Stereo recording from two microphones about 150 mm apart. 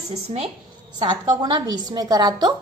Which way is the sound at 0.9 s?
30° right (ahead or behind).